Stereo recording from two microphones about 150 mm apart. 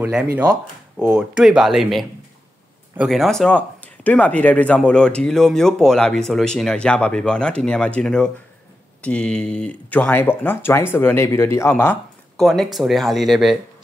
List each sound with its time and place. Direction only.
0.4 s speech: 5° right (ahead or behind); by 12.0 s 15° left (ahead or behind)
12.4 s speech: 5° left (ahead or behind)